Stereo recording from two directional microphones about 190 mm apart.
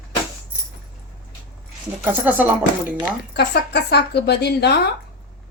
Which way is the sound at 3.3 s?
60° left (ahead or behind).